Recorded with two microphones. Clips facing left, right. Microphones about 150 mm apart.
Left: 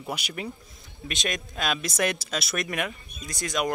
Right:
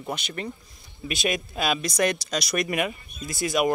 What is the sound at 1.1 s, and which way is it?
Speech, 5° right (ahead or behind).